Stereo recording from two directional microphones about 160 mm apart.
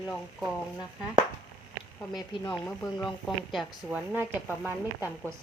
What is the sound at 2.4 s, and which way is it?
Speech, 10° left (ahead or behind).